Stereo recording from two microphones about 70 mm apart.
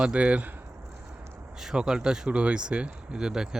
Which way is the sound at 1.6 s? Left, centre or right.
Centre.